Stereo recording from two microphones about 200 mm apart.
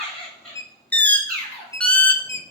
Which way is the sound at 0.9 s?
5° left (ahead or behind).